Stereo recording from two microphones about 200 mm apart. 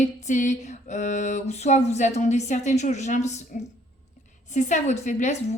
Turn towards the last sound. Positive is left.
turn(degrees=35)  # may be behind; listen again after turning